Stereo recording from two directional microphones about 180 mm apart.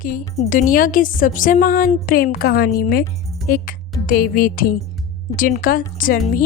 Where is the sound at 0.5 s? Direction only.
50° left (ahead or behind).